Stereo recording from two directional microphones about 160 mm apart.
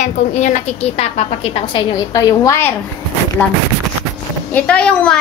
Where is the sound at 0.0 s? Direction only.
50° left (ahead or behind); by 2.7 s 20° left (ahead or behind).